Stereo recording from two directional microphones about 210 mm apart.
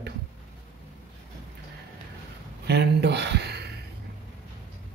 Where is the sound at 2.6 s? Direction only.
55° right (ahead or behind).